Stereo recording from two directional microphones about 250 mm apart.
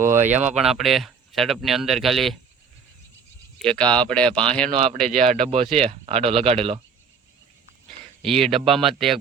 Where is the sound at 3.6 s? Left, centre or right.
Centre.